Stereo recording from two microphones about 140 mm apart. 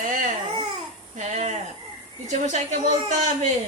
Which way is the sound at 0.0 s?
70° right (ahead or behind).